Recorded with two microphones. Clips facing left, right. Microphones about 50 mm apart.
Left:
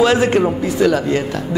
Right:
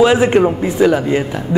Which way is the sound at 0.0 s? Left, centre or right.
Centre.